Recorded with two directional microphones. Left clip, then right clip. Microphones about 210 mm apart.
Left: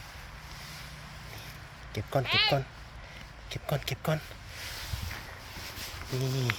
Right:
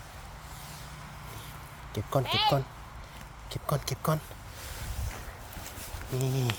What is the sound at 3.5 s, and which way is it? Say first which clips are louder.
Speech: right 1 dB; 15° right (ahead or behind).